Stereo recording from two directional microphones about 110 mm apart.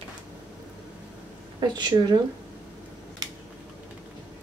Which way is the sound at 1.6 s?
40° right (ahead or behind).